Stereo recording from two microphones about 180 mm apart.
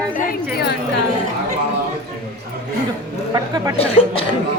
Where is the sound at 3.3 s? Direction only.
20° right (ahead or behind).